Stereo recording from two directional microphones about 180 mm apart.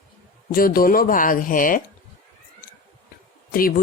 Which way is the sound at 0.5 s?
55° left (ahead or behind).